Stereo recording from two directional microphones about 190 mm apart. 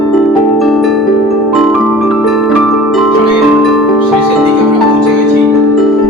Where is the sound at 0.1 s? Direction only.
Centre (ahead or behind).